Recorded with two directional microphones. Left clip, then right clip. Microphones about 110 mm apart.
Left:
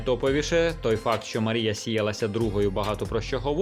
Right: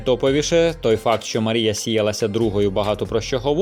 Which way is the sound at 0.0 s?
45° right (ahead or behind).